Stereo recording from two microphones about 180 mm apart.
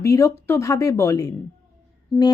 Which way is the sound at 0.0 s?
15° left (ahead or behind).